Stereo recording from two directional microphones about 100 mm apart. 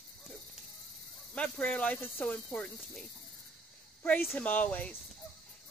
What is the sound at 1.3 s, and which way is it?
Speech, 15° left (ahead or behind).